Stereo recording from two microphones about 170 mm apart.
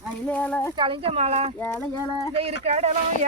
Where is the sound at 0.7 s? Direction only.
30° right (ahead or behind).